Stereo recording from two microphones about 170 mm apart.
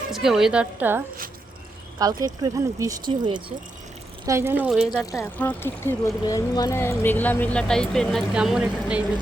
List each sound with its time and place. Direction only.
0.1 s a woman's voice: centre (ahead or behind)
2.2 s speech: 20° right (ahead or behind)
4.3 s speech: 15° right (ahead or behind)
5.1 s speech: 10° left (ahead or behind); by 9.0 s 5° right (ahead or behind)